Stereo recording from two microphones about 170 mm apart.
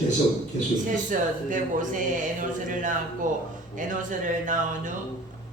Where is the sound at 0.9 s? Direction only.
50° right (ahead or behind).